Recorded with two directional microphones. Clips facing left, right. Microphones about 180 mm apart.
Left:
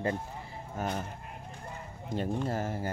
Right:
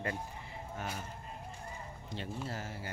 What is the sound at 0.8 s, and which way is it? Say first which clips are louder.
Speech: left 8 dB; 45° left (ahead or behind).